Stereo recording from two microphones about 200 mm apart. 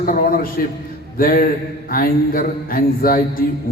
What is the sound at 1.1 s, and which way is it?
A man's voice, 45° left (ahead or behind).